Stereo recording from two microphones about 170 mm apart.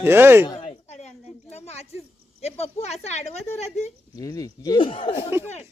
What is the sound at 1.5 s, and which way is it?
A woman's voice, 40° left (ahead or behind).